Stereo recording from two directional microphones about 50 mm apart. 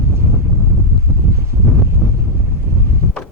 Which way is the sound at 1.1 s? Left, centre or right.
Right.